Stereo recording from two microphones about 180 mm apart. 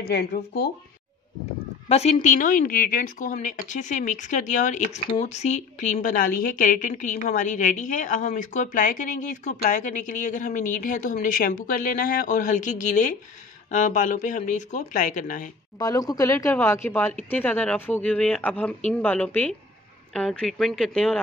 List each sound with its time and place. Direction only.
0.0 s speech: 60° left (ahead or behind)
1.9 s a woman's voice: 35° left (ahead or behind)
15.8 s speech: 20° left (ahead or behind); by 21.2 s 5° left (ahead or behind)